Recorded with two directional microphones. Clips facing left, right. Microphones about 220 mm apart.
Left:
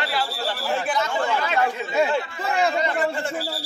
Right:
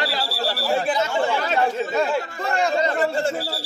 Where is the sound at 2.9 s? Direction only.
40° right (ahead or behind).